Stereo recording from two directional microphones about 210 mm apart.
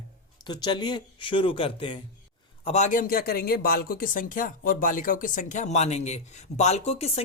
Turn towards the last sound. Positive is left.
turn(degrees=30)  # may be behind; listen again after turning